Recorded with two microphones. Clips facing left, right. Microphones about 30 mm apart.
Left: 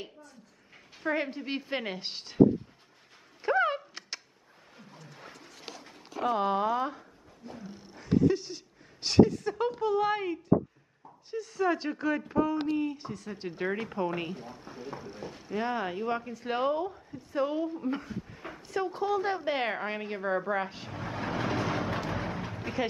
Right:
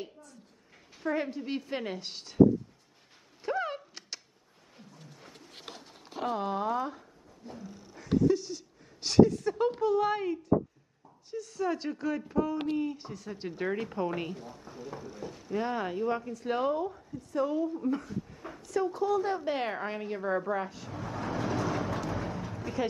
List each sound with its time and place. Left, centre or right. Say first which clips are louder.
1.0 s speech: left 1 dB; left
3.4 s a sound: left 6 dB; left
4.9 s a sound: left 4 dB; left
6.3 s speech: left 3 dB; left
7.4 s a woman's voice: left 1 dB; centre
8.0 s a woman's voice: left 1 dB; left
12.9 s speech: left 2 dB; centre
13.6 s a woman's voice: even; centre
14.3 s speech: left 1 dB; left
15.5 s speech: even; centre
17.1 s speech: even; left
18.7 s a sound: right 1 dB; left